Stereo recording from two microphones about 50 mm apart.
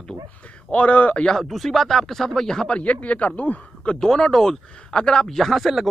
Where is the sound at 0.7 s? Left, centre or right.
Left.